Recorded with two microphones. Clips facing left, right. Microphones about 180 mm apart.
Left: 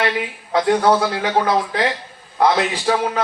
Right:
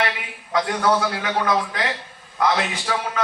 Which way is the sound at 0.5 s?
30° left (ahead or behind).